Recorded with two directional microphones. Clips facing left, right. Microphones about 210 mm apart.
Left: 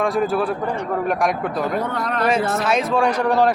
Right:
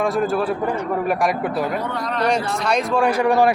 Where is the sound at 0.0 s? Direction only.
Centre (ahead or behind).